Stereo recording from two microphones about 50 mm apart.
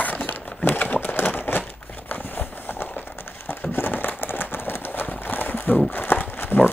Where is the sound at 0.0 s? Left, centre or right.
Left.